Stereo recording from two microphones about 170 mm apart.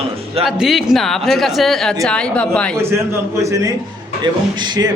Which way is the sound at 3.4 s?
20° right (ahead or behind).